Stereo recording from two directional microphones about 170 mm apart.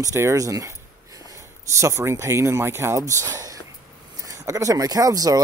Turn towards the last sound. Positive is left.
turn(degrees=-20)  # may be behind; listen again after turning